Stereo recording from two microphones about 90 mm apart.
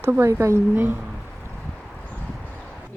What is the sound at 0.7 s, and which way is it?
Speech, 20° right (ahead or behind).